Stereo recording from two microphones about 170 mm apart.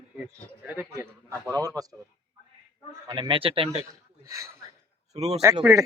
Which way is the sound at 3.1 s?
30° right (ahead or behind).